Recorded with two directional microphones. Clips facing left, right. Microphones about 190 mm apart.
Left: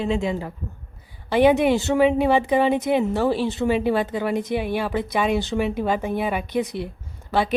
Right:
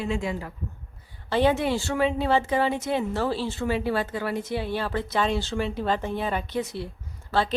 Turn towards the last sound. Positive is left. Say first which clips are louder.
# left 3 dB
turn(degrees=15)  # may be behind; listen again after turning